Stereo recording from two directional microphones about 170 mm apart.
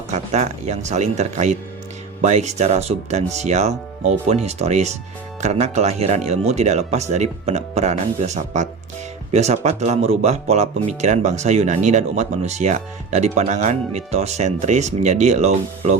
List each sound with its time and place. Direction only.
0.1 s speech: 40° right (ahead or behind)